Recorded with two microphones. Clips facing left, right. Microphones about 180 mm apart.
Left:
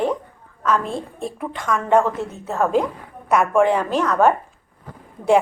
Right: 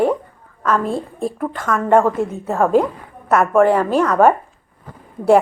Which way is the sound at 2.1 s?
10° right (ahead or behind).